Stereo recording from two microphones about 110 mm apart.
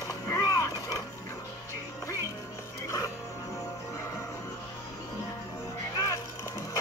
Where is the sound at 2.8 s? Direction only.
25° left (ahead or behind).